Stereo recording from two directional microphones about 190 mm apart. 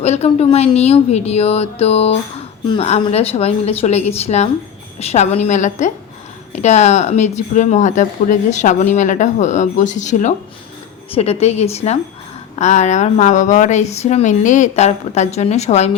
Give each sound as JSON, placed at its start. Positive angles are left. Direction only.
{"t": 0.0, "sound": "speech", "side_deg": 35}